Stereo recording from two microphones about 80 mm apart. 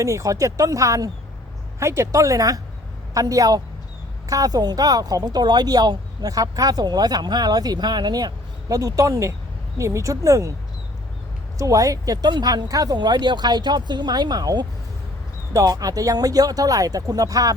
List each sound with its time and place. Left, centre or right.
0.0 s speech: right
8.7 s speech: right
11.5 s speech: right